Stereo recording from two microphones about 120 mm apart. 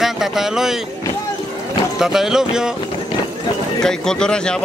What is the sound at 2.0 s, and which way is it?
Speech, 5° right (ahead or behind).